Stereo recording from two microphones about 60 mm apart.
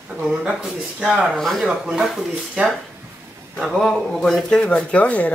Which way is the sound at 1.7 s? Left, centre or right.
Centre.